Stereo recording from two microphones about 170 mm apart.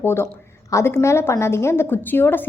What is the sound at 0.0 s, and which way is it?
A woman's voice, 15° left (ahead or behind).